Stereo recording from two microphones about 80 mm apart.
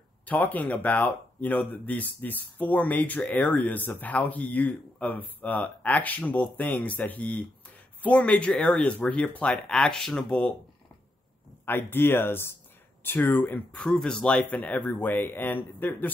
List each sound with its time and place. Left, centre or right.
0.2 s speech: left
9.8 s speech: centre
11.6 s speech: left
13.7 s speech: centre